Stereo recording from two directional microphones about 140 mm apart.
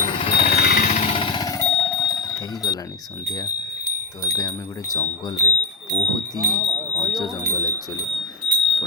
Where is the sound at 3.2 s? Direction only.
30° left (ahead or behind).